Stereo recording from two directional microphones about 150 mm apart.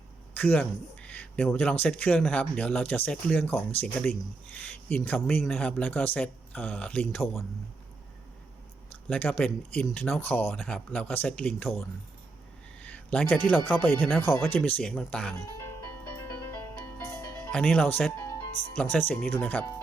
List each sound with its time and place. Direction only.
0.3 s speech: 10° left (ahead or behind)
8.9 s speech: 10° left (ahead or behind)
10.5 s speech: centre (ahead or behind)
12.8 s a sound: 10° left (ahead or behind)
13.7 s speech: 10° left (ahead or behind)
15.4 s music: 20° left (ahead or behind)
17.5 s speech: 5° left (ahead or behind)